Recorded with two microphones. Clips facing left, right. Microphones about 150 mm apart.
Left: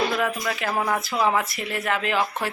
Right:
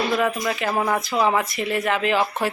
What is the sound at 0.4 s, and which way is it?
Speech, 5° right (ahead or behind).